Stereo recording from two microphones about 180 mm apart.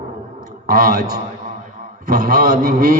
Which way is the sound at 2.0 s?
55° right (ahead or behind).